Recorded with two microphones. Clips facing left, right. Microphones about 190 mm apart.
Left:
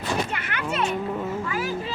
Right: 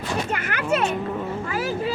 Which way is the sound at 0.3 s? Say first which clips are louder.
Right 5 dB; 45° right (ahead or behind).